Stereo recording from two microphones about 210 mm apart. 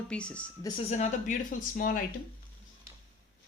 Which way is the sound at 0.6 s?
25° left (ahead or behind).